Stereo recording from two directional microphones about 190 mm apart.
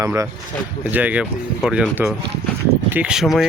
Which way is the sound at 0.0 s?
15° right (ahead or behind).